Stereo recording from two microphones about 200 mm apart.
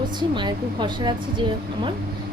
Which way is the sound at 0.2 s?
20° right (ahead or behind).